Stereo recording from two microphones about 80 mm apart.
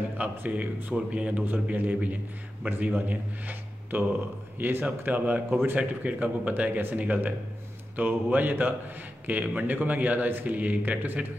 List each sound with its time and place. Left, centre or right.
0.2 s a man's voice: right